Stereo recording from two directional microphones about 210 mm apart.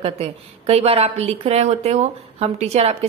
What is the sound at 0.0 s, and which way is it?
A woman's voice, 30° right (ahead or behind).